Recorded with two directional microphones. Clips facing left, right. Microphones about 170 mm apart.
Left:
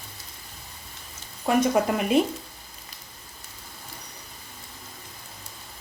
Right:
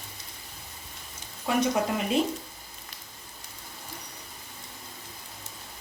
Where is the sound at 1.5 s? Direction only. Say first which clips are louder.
Left 5 dB; 50° left (ahead or behind).